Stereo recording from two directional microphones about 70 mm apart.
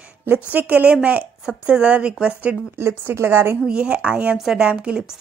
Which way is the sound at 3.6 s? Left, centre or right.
Centre.